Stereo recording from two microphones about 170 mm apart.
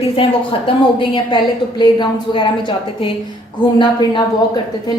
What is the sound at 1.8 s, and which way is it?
Speech, 30° left (ahead or behind).